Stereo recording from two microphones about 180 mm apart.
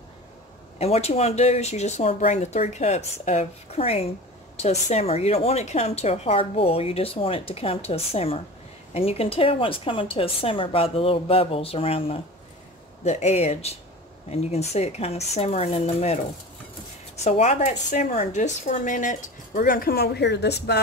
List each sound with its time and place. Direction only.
0.7 s a woman's voice: 35° left (ahead or behind)
17.2 s speech: 40° left (ahead or behind); by 20.8 s 65° left (ahead or behind)